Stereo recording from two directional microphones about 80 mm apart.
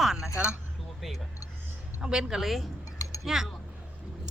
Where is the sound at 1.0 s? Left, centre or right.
Centre.